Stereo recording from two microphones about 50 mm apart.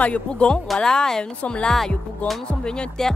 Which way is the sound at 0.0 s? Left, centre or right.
Left.